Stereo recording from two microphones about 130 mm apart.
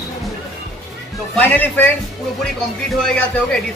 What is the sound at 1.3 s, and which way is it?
Speech, 10° left (ahead or behind).